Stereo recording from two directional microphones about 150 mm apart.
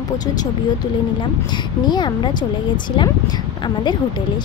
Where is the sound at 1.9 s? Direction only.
30° left (ahead or behind).